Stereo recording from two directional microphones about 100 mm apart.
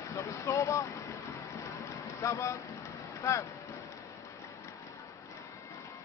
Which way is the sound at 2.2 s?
30° left (ahead or behind).